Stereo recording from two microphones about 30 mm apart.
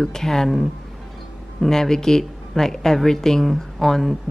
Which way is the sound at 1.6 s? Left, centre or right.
Centre.